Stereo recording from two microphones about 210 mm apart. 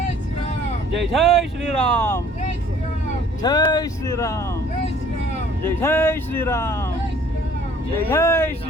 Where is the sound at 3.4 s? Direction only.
20° left (ahead or behind).